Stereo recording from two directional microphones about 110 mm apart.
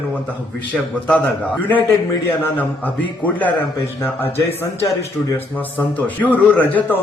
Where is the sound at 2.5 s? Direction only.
15° left (ahead or behind).